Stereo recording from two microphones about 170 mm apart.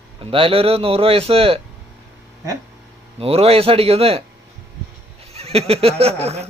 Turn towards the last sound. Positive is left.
turn(degrees=-40)  # may be behind; listen again after turning